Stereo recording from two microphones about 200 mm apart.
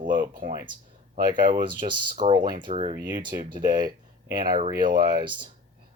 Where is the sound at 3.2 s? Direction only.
40° right (ahead or behind).